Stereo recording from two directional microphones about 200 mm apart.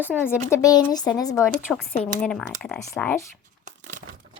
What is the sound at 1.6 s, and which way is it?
Speech, centre (ahead or behind).